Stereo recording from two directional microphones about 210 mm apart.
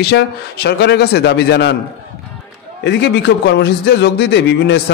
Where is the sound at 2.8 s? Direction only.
55° left (ahead or behind).